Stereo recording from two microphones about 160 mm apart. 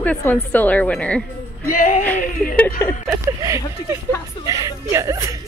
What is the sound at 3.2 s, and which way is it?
Speech, 20° right (ahead or behind).